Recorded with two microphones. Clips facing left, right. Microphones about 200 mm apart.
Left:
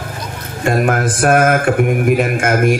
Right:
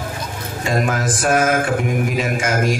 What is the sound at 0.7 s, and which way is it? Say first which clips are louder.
Speech: left 5 dB; 60° left (ahead or behind).